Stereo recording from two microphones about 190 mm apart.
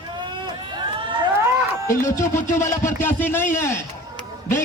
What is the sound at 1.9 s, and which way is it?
Speech, 15° left (ahead or behind).